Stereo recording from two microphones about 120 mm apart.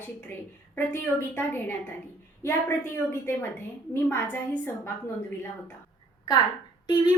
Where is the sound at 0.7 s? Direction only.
20° left (ahead or behind).